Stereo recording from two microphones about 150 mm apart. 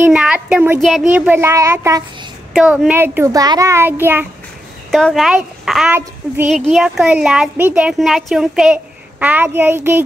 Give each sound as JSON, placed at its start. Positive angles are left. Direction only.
{"t": 0.0, "sound": "speech", "side_deg": -5}
{"t": 1.1, "sound": "speech", "side_deg": -10}
{"t": 2.5, "sound": "speech", "side_deg": -5}
{"t": 4.9, "sound": "speech", "side_deg": 0}
{"t": 5.9, "sound": "speech", "side_deg": -15}
{"t": 6.5, "sound": "speech", "side_deg": 0}